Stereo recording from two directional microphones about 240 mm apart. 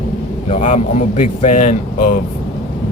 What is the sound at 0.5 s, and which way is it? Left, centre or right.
A man's voice, left.